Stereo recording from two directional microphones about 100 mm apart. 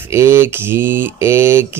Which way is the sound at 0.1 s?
25° right (ahead or behind).